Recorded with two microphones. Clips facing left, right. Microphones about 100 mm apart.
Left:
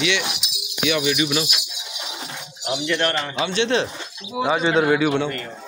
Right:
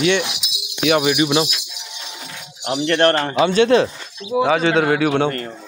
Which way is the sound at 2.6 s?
45° right (ahead or behind).